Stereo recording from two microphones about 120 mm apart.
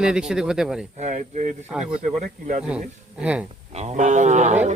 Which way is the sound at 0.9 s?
75° right (ahead or behind).